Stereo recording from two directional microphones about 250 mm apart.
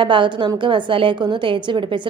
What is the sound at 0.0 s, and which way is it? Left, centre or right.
A woman's voice, centre.